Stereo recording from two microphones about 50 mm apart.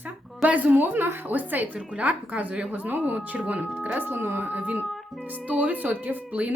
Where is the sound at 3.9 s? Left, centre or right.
Right.